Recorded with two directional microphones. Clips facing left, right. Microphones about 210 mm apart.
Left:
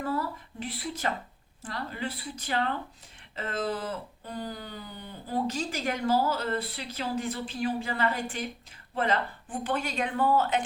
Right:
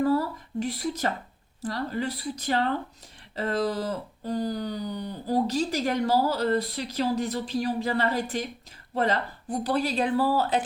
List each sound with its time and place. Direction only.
0.0 s speech: 40° right (ahead or behind)